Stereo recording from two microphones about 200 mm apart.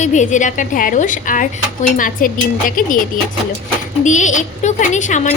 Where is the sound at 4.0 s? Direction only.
40° left (ahead or behind).